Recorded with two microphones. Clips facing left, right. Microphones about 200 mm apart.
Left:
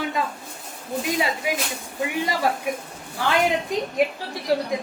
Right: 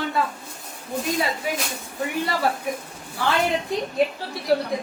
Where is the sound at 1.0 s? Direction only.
15° left (ahead or behind).